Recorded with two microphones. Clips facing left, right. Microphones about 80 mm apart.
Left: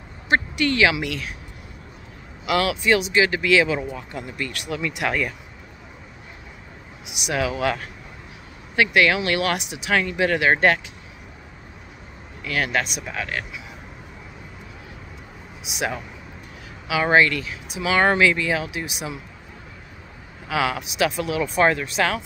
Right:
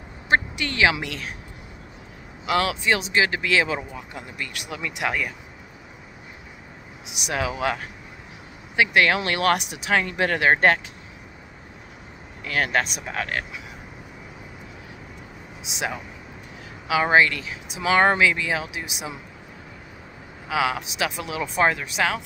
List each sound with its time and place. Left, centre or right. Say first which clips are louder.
0.3 s speech: left 2 dB; right
2.4 s speech: left 1 dB; right
3.9 s speech: left 4 dB; centre
7.1 s a sound: left 2 dB; right
7.3 s speech: left 2 dB; right
8.9 s speech: left 2 dB; right
12.4 s speech: even; right
15.6 s speech: left 2 dB; right
17.0 s speech: left 1 dB; centre
18.1 s speech: left 2 dB; centre
20.4 s speech: even; centre